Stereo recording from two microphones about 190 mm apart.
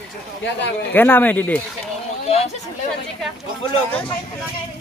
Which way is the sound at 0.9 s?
10° left (ahead or behind).